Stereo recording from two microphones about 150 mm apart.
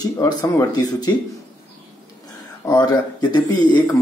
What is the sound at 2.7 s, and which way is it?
Speech, 25° left (ahead or behind).